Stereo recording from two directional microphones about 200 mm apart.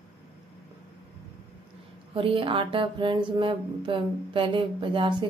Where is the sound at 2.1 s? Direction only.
25° right (ahead or behind).